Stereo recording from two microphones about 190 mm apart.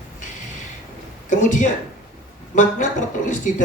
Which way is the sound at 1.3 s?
40° left (ahead or behind).